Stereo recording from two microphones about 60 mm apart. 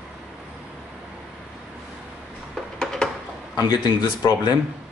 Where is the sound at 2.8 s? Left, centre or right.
Centre.